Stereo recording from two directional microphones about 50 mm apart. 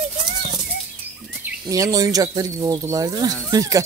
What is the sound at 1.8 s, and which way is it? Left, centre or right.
Speech, right.